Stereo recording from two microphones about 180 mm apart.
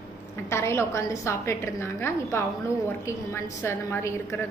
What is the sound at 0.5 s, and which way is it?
A woman's voice, 15° left (ahead or behind).